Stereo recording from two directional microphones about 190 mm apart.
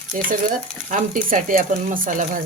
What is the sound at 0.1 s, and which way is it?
Stir, 45° right (ahead or behind).